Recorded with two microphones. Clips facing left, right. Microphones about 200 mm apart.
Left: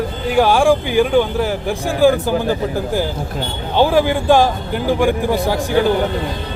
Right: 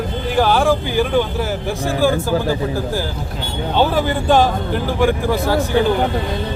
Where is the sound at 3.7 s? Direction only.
10° left (ahead or behind).